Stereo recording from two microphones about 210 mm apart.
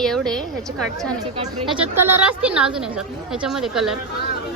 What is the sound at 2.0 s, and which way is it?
A woman's voice, 10° right (ahead or behind).